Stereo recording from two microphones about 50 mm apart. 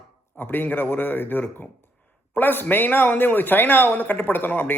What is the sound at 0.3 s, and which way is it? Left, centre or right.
A man's voice, left.